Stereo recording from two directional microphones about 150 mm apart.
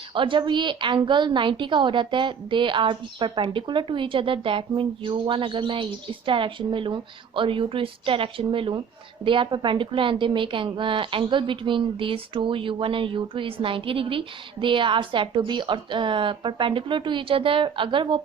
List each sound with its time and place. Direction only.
0.1 s a woman's voice: 35° right (ahead or behind)